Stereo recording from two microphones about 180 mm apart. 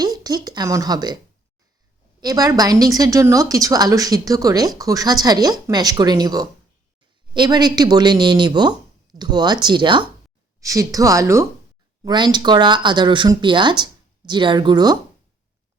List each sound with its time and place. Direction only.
0.0 s speech: 20° right (ahead or behind)
2.2 s speech: 20° right (ahead or behind)